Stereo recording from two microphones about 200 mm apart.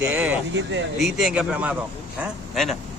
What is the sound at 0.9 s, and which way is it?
Speech, centre (ahead or behind).